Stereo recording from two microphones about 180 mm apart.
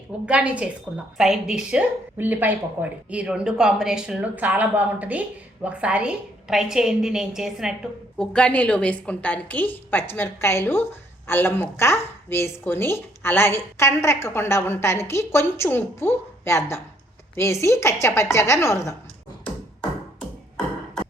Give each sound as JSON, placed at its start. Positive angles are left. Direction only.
{"t": 0.3, "sound": "a woman's voice", "side_deg": -5}